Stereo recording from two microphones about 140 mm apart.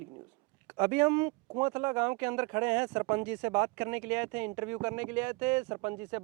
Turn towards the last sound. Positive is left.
turn(degrees=-20)  # may be behind; listen again after turning